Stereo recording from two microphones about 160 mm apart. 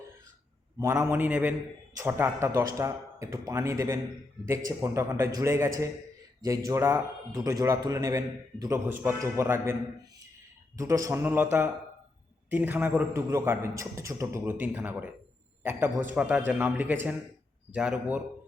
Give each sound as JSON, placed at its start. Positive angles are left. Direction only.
{"t": 0.8, "sound": "a man's voice", "side_deg": -20}
{"t": 10.8, "sound": "a man's voice", "side_deg": -20}
{"t": 12.5, "sound": "a man's voice", "side_deg": -10}